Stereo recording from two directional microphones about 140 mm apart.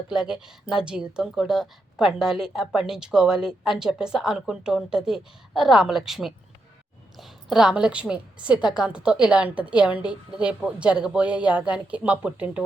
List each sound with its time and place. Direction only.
0.1 s a woman's voice: 5° right (ahead or behind)